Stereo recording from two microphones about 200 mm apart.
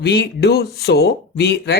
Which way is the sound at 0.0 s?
55° left (ahead or behind).